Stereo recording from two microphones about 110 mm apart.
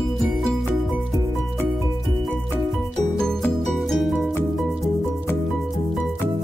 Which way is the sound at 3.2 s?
5° left (ahead or behind).